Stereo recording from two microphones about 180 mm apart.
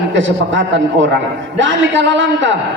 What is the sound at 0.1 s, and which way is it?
A man's voice, 90° right.